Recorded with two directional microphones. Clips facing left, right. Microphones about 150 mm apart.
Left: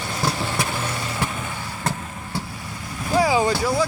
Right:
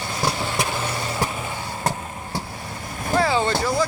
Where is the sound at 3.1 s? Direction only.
10° left (ahead or behind).